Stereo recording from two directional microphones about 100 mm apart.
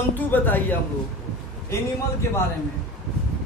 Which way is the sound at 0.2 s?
20° left (ahead or behind).